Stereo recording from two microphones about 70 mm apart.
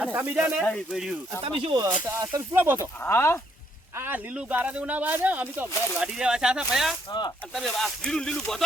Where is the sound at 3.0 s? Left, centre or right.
Left.